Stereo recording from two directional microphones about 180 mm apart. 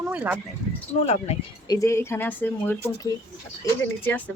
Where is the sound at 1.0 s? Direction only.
35° left (ahead or behind).